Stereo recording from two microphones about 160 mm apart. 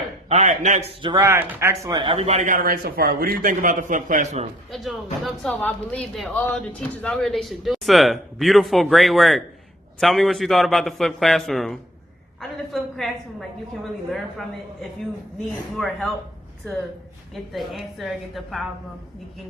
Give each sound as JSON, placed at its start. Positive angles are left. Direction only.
{"t": 0.3, "sound": "speech", "side_deg": -45}
{"t": 1.0, "sound": "speech", "side_deg": -20}
{"t": 4.7, "sound": "a woman's voice", "side_deg": 0}
{"t": 14.1, "sound": "speech", "side_deg": 0}
{"t": 17.5, "sound": "speech", "side_deg": 0}